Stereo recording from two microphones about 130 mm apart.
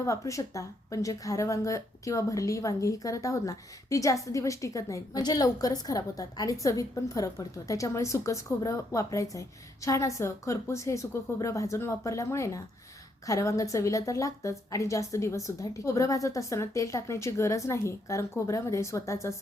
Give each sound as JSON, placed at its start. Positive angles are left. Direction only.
{"t": 0.0, "sound": "a woman's voice", "side_deg": 25}